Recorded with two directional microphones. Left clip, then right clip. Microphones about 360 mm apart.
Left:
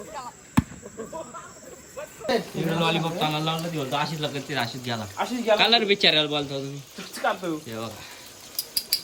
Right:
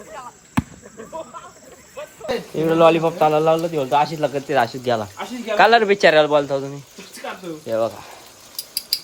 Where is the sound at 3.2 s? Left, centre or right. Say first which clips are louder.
Right 11 dB; centre.